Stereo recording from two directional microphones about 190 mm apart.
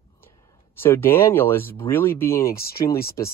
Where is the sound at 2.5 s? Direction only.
50° left (ahead or behind).